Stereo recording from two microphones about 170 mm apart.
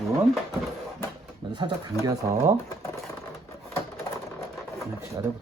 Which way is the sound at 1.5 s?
25° right (ahead or behind).